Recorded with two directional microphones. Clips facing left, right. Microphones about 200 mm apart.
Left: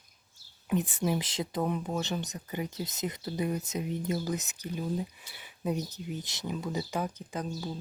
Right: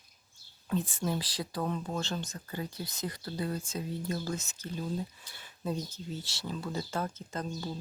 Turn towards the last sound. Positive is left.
turn(degrees=5)  # may be behind; listen again after turning